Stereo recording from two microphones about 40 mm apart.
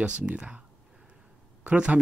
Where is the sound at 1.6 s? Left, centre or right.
Right.